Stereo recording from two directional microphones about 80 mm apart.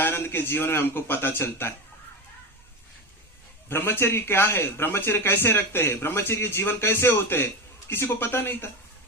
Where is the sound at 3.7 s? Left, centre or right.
Left.